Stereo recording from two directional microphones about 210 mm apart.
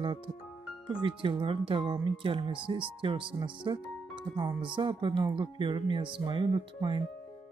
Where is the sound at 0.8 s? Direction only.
25° right (ahead or behind).